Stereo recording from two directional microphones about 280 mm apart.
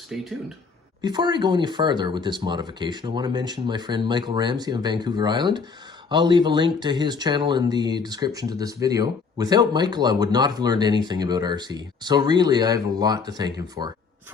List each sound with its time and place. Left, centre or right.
0.1 s speech: centre
1.0 s speech: centre